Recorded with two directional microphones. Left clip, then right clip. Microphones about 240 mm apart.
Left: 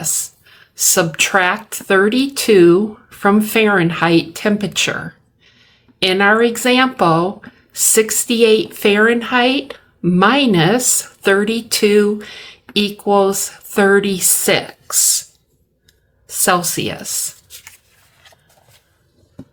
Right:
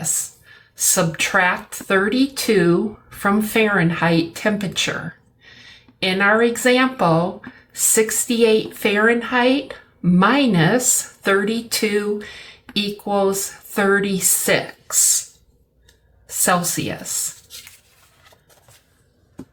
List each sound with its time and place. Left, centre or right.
0.0 s speech: left
16.5 s speech: left